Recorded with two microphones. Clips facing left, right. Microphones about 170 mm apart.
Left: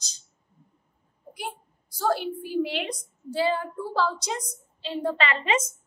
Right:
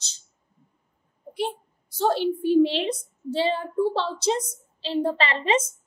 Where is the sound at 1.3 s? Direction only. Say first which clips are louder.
Right 8 dB; 25° right (ahead or behind).